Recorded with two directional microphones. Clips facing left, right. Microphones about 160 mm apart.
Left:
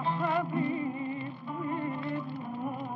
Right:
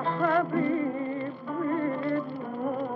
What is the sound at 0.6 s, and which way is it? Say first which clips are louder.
Music: right 5 dB; 50° right (ahead or behind).